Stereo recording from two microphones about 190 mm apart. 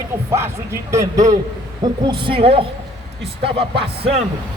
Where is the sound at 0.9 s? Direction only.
15° right (ahead or behind).